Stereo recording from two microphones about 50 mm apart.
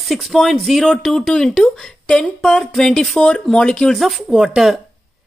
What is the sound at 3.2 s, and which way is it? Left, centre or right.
Speech, centre.